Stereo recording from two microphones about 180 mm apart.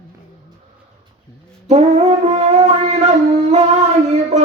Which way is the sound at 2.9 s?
35° right (ahead or behind).